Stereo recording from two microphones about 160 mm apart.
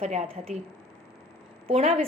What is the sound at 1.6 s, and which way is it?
Speech, 40° right (ahead or behind).